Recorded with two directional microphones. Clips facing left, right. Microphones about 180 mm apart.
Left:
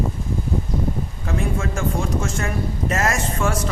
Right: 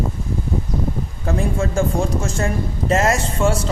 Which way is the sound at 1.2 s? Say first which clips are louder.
Right 4 dB; 35° right (ahead or behind).